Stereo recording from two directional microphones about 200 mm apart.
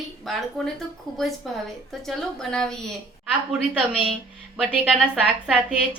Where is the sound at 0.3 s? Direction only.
Centre (ahead or behind).